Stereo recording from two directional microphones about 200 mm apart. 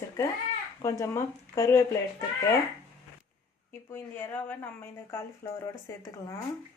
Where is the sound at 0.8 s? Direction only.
15° left (ahead or behind).